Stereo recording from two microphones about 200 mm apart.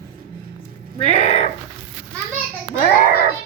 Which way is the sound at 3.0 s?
45° left (ahead or behind).